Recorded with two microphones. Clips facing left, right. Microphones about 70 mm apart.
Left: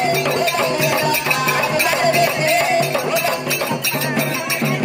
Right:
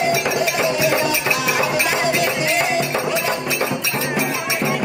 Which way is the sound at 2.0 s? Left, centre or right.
Left.